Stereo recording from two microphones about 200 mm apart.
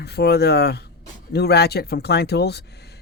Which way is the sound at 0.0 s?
55° left (ahead or behind).